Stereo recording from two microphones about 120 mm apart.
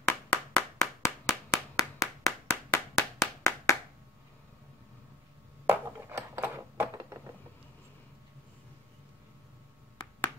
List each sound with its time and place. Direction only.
0.1 s clapping: 10° left (ahead or behind)
1.0 s clapping: 20° left (ahead or behind)
5.7 s a sound: 20° right (ahead or behind)